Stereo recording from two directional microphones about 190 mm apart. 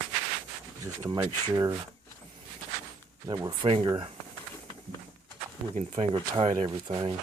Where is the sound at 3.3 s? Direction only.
20° right (ahead or behind).